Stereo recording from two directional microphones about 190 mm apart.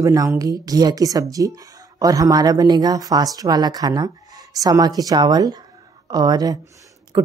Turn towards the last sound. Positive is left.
turn(degrees=-20)  # may be behind; listen again after turning